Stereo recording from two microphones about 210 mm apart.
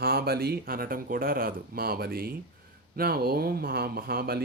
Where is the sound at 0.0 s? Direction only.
45° right (ahead or behind).